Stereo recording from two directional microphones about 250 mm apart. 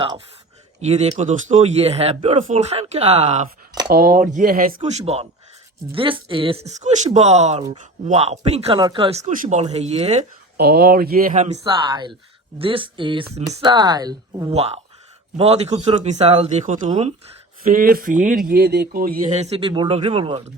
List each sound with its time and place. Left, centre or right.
0.8 s speech: right
10.6 s speech: right